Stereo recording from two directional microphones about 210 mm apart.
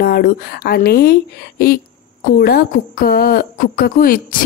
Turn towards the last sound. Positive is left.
turn(degrees=45)  # may be behind; listen again after turning